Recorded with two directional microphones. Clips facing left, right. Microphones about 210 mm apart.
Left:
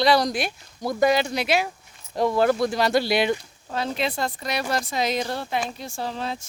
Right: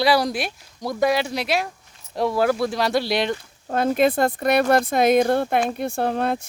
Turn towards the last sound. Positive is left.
turn(degrees=-55)  # may be behind; listen again after turning